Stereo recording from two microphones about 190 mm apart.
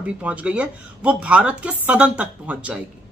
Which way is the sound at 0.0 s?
5° right (ahead or behind).